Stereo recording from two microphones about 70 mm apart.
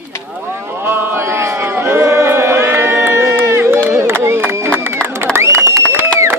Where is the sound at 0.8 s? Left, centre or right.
Right.